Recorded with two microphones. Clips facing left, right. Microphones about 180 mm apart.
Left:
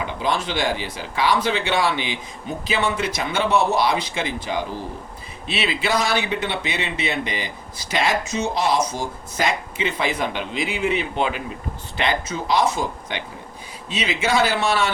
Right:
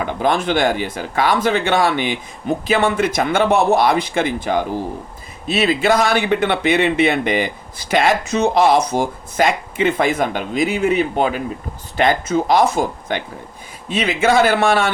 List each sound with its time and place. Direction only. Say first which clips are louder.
0.1 s speech: right 9 dB; 55° right (ahead or behind)